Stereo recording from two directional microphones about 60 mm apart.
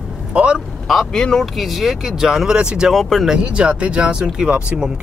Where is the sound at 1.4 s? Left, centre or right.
Centre.